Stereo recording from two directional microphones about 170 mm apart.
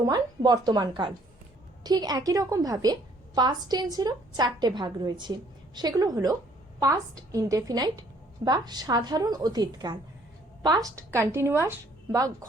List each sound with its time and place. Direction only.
0.0 s a woman's voice: 20° right (ahead or behind)